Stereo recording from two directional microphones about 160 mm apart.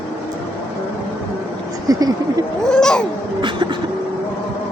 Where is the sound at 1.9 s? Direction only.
20° right (ahead or behind).